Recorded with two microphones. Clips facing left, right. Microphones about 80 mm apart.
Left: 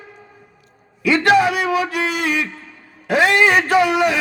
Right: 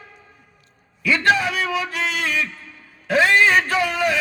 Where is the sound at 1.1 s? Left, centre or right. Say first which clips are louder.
Left 4 dB; left.